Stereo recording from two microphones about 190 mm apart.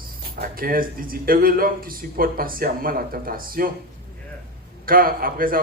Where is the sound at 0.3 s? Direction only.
50° right (ahead or behind).